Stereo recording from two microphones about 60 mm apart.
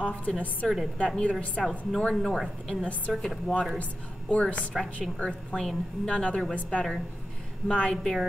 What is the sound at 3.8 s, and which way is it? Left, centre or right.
A woman's voice, left.